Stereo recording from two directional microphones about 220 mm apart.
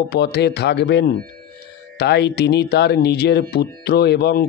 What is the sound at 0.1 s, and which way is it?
Speech, 50° left (ahead or behind).